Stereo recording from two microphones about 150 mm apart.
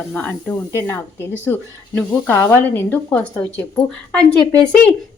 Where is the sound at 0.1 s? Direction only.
10° left (ahead or behind).